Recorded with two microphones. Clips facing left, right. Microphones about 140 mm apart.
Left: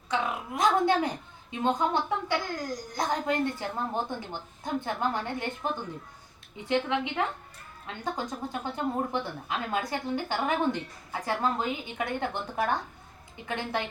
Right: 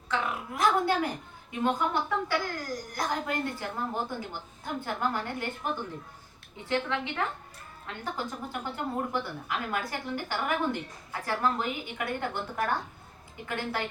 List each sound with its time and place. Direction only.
0.1 s a woman's voice: 20° left (ahead or behind)